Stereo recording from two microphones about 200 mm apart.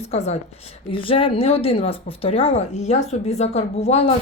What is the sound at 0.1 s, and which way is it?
A woman's voice, 30° left (ahead or behind).